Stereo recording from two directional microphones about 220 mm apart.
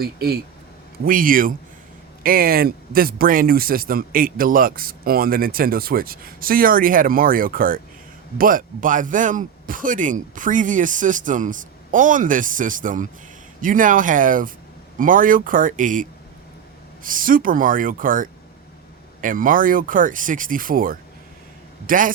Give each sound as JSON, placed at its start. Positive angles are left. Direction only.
{"t": 0.0, "sound": "speech", "side_deg": -45}